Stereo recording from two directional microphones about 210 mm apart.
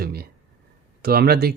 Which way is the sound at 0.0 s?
45° right (ahead or behind).